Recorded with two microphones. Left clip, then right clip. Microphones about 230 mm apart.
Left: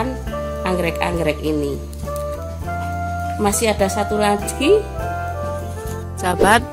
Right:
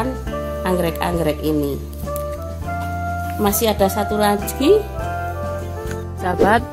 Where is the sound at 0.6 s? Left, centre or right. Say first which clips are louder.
Even; centre.